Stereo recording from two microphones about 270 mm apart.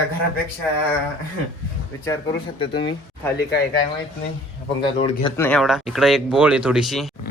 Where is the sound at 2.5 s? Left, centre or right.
Centre.